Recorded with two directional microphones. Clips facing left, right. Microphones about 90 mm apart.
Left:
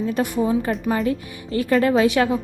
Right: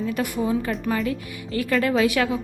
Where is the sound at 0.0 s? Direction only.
30° left (ahead or behind).